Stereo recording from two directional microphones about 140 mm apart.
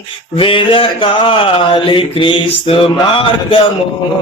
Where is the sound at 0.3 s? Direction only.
40° left (ahead or behind).